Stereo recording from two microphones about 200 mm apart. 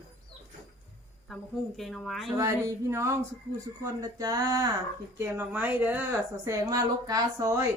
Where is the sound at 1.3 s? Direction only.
Centre (ahead or behind).